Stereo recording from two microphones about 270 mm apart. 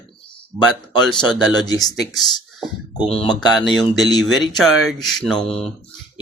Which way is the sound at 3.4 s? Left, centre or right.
Centre.